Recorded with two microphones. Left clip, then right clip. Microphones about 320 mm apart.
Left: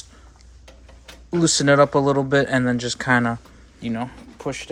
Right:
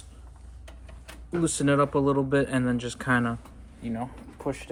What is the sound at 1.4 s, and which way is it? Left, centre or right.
Speech, centre.